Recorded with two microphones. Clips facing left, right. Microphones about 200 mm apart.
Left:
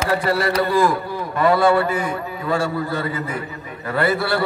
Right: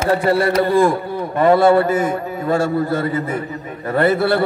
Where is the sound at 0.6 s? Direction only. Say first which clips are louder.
Right 3 dB; 25° right (ahead or behind).